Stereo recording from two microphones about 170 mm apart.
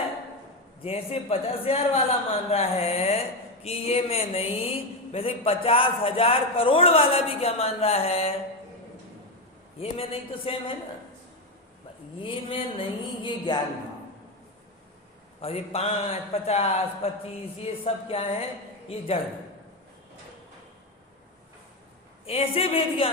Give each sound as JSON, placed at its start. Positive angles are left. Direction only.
{"t": 0.8, "sound": "speech", "side_deg": 35}
{"t": 9.8, "sound": "speech", "side_deg": 35}
{"t": 12.2, "sound": "speech", "side_deg": 30}
{"t": 13.2, "sound": "a sound", "side_deg": 25}
{"t": 15.4, "sound": "speech", "side_deg": 35}
{"t": 22.3, "sound": "speech", "side_deg": 35}